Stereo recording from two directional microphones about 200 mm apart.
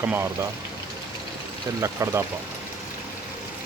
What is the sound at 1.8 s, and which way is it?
Speech, 15° right (ahead or behind).